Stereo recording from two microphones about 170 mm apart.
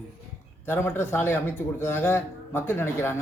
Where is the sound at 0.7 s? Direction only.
10° left (ahead or behind).